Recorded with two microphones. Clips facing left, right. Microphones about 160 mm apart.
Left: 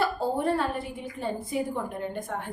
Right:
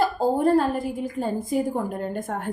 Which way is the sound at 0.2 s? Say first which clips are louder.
Right 6 dB; 40° right (ahead or behind).